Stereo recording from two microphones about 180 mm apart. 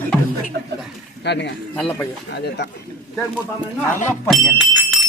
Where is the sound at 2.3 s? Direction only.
70° left (ahead or behind).